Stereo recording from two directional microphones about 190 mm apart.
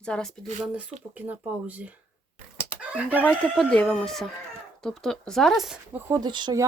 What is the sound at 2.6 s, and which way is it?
Chicken, 5° right (ahead or behind).